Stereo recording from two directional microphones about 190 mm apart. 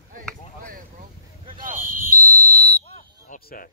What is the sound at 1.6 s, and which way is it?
Fire alarm, 45° right (ahead or behind).